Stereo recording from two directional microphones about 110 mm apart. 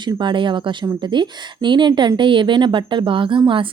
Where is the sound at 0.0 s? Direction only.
45° right (ahead or behind).